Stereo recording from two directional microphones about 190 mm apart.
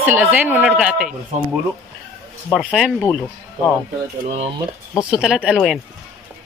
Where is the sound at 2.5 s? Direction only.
Centre (ahead or behind).